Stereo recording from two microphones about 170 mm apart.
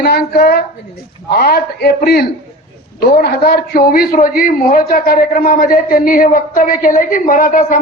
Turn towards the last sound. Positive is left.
turn(degrees=50)  # may be behind; listen again after turning